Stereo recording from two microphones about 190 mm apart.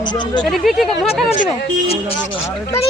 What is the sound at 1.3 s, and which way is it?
Speech, 40° left (ahead or behind).